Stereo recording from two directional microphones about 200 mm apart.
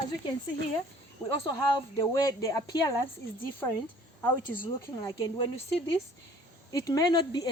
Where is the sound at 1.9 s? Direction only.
15° left (ahead or behind).